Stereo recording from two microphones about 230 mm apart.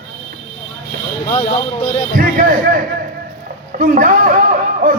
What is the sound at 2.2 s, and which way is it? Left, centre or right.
Speech, right.